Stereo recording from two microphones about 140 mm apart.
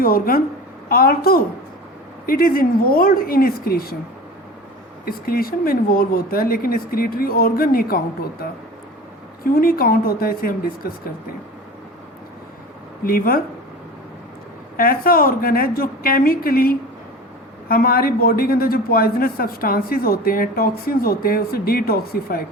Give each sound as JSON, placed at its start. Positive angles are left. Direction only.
{"t": 0.0, "sound": "a man's voice", "side_deg": 90}
{"t": 5.0, "sound": "a man's voice", "side_deg": 90}
{"t": 13.1, "sound": "a man's voice", "side_deg": 90}
{"t": 14.8, "sound": "a man's voice", "side_deg": 90}